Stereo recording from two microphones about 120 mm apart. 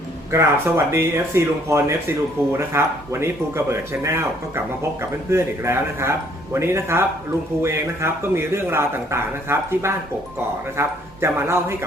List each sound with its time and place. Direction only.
0.3 s speech: 20° right (ahead or behind)